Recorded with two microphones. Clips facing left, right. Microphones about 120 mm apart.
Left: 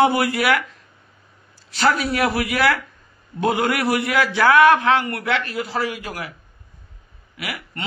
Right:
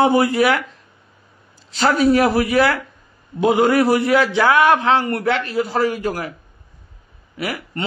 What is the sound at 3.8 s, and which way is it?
Speech, 35° right (ahead or behind).